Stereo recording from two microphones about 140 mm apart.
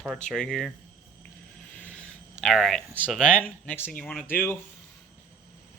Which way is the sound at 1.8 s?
10° left (ahead or behind).